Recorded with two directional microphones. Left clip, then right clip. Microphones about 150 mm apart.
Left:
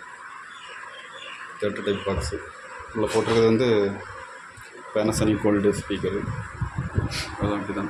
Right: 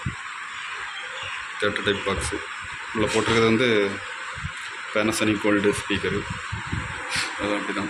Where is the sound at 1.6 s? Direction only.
15° left (ahead or behind).